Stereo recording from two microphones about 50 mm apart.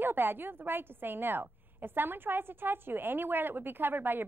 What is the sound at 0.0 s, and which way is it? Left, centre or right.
A woman's voice, right.